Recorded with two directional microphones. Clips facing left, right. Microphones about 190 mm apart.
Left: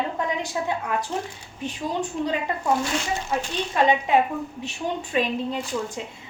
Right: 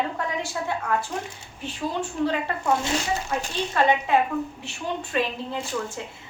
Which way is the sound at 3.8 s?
15° left (ahead or behind).